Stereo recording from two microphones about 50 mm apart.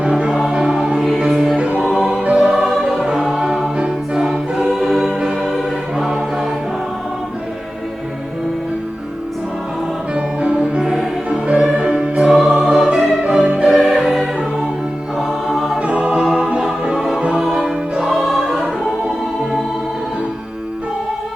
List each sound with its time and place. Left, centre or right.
0.0 s music: centre
0.3 s music: centre
1.5 s music: right
2.5 s opera: centre
3.2 s music: centre
3.8 s music: centre
10.2 s music: centre
10.8 s music: centre
11.4 s music: centre
15.8 s music: right
16.2 s music: centre
17.2 s music: centre
18.4 s choir: centre